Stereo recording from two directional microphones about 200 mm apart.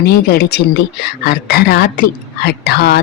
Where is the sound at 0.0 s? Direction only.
50° left (ahead or behind).